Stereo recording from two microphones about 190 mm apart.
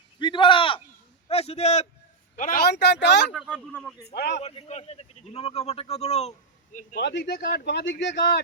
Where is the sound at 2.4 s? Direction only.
50° left (ahead or behind).